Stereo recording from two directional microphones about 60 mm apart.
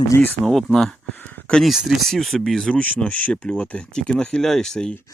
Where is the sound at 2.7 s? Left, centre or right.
Left.